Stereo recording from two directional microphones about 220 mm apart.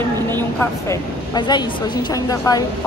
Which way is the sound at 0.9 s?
20° left (ahead or behind).